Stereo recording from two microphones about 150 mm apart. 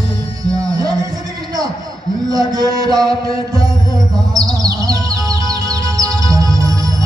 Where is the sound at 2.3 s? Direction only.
25° right (ahead or behind).